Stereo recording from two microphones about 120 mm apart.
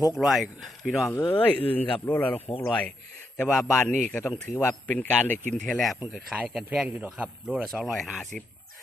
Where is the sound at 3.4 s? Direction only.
Centre (ahead or behind).